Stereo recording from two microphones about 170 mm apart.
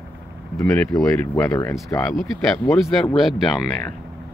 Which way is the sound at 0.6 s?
15° left (ahead or behind).